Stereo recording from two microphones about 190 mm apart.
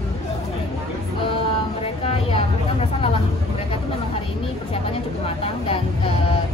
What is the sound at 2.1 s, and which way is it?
Vehicle, 30° left (ahead or behind).